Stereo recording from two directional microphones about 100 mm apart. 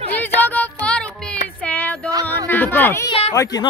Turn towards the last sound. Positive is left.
turn(degrees=75)  # may be behind; listen again after turning